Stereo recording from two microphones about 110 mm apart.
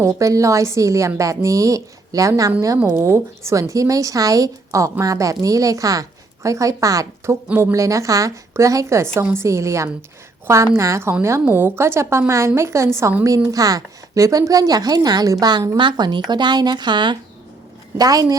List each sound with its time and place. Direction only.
0.0 s a woman's voice: 30° right (ahead or behind)